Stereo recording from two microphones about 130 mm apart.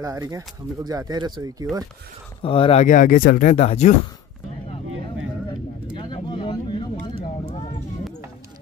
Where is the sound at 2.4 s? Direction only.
45° left (ahead or behind).